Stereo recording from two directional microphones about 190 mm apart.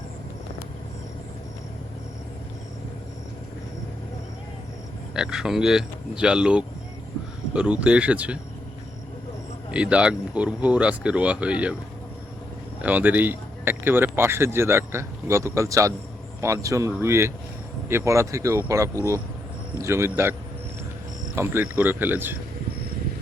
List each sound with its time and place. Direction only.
5.1 s speech: 5° right (ahead or behind)
9.7 s speech: 5° right (ahead or behind)
12.8 s speech: 10° right (ahead or behind)
21.3 s speech: 10° right (ahead or behind)